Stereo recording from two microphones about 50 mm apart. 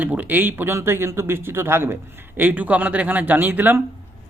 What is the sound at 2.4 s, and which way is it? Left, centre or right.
Speech, right.